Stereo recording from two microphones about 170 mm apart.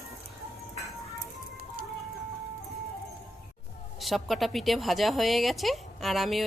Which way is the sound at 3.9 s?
Centre (ahead or behind).